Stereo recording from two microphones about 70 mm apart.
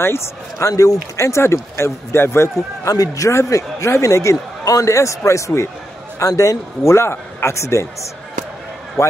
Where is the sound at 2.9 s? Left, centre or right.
Left.